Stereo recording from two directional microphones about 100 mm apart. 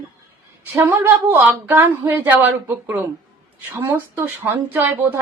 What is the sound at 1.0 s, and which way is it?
A woman's voice, 20° right (ahead or behind).